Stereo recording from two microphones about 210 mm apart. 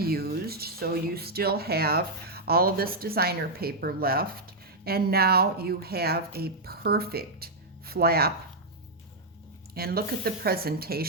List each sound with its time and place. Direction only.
0.0 s speech: 45° right (ahead or behind)
9.7 s speech: 45° right (ahead or behind)